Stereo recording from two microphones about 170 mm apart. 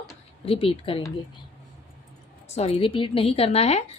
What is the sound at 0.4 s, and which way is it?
Speech, 35° left (ahead or behind).